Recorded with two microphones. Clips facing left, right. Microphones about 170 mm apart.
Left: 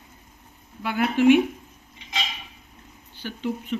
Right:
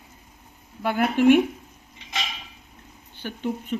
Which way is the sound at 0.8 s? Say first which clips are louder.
Even; 50° right (ahead or behind).